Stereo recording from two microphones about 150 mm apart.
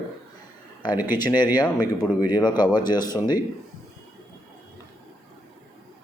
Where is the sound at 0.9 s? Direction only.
10° right (ahead or behind).